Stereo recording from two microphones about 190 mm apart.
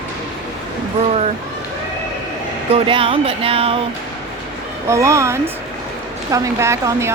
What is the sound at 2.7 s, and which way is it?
Speech, 30° right (ahead or behind).